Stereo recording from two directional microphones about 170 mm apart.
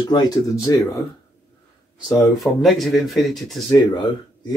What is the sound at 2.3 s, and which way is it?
Speech, centre (ahead or behind).